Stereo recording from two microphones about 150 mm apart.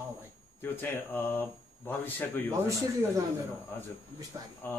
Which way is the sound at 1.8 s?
15° left (ahead or behind).